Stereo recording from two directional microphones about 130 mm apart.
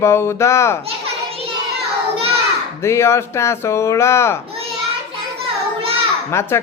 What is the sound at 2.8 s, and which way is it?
Speech, 20° left (ahead or behind).